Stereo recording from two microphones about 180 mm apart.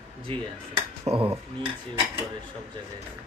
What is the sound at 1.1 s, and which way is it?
Dishes, 35° right (ahead or behind).